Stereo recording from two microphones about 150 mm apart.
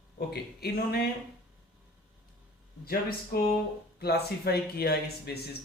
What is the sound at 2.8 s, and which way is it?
Speech, 90° left.